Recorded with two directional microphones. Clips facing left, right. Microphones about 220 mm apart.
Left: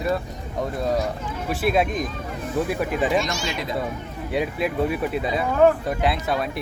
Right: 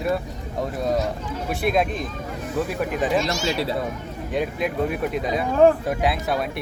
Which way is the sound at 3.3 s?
35° right (ahead or behind).